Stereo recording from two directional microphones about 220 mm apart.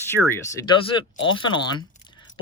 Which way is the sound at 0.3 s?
15° left (ahead or behind).